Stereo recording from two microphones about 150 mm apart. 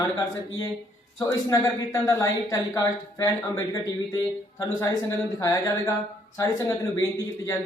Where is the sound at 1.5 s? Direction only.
20° left (ahead or behind).